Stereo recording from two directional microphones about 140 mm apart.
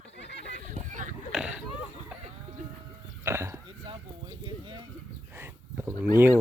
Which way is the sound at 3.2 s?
20° right (ahead or behind).